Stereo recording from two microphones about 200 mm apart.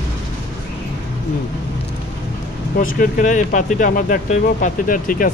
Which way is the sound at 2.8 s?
45° left (ahead or behind).